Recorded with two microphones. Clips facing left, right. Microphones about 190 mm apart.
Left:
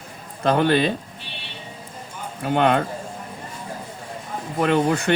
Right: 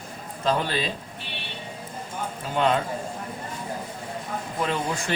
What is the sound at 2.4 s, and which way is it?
Speech, 65° left (ahead or behind).